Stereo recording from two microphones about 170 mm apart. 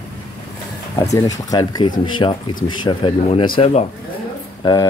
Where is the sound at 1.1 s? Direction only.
20° left (ahead or behind).